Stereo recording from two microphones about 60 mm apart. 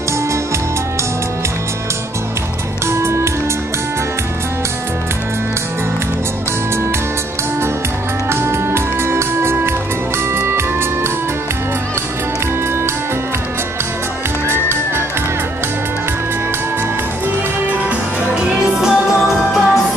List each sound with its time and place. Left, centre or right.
2.9 s music: right
8.3 s music: right
14.5 s music: right
17.8 s music: centre
18.9 s music: centre